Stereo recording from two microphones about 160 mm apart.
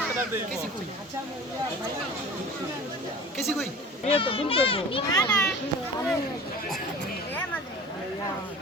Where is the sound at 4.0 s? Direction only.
35° left (ahead or behind).